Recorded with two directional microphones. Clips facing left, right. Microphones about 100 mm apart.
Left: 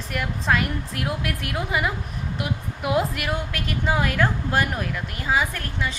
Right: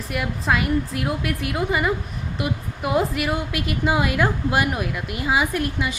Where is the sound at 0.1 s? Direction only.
5° right (ahead or behind).